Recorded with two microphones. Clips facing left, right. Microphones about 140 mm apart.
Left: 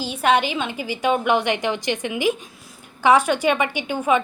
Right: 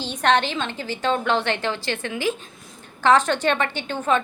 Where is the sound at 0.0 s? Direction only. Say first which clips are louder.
Left 1 dB; 10° left (ahead or behind).